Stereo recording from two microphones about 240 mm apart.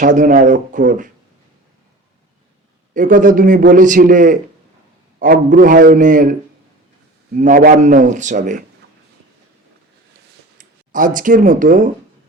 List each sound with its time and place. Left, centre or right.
0.0 s a man's voice: right
2.9 s a man's voice: right
7.3 s a man's voice: right
10.9 s a man's voice: right